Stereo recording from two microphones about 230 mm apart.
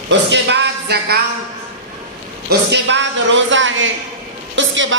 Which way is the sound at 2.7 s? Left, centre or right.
Right.